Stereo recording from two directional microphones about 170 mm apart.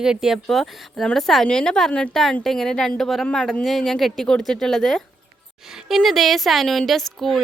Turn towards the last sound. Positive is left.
turn(degrees=0)  # may be behind; listen again after turning